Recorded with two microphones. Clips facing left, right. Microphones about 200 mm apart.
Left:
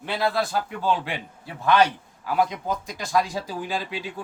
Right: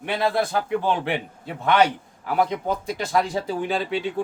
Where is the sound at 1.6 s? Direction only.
20° right (ahead or behind).